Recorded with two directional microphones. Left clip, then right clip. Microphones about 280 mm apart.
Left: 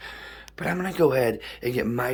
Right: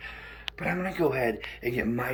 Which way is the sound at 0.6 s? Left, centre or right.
Left.